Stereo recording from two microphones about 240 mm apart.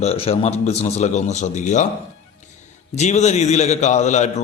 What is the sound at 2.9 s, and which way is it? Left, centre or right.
A man's voice, left.